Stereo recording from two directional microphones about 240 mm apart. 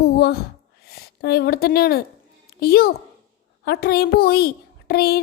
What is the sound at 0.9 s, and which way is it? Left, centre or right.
A woman's voice, left.